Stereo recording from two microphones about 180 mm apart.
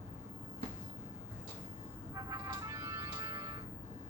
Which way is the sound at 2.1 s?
20° right (ahead or behind).